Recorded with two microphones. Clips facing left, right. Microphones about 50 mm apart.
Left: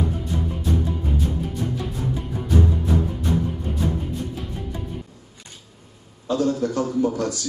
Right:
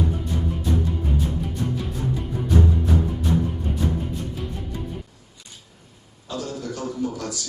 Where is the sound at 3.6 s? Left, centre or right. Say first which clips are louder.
Even; centre.